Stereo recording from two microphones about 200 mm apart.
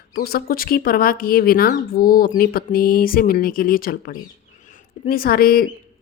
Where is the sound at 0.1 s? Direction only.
50° left (ahead or behind).